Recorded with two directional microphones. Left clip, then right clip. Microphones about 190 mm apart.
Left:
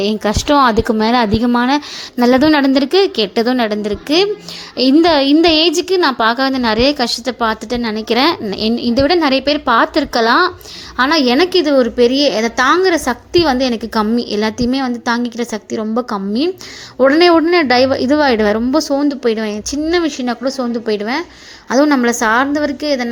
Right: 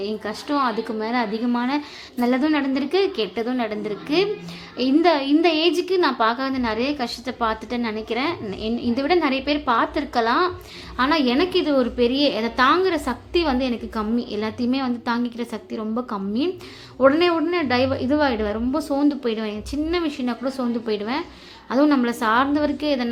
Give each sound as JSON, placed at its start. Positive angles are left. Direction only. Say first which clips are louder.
{"t": 0.0, "sound": "a woman's voice", "louder": "left 11 dB", "side_deg": 45}